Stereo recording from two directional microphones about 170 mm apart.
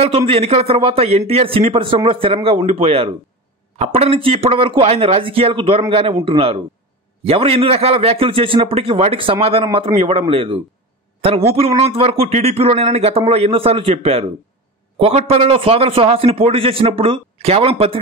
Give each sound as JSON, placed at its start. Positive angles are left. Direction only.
{"t": 0.0, "sound": "a man's voice", "side_deg": -35}